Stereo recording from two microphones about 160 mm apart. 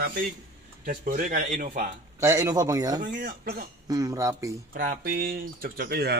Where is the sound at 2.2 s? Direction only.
20° right (ahead or behind).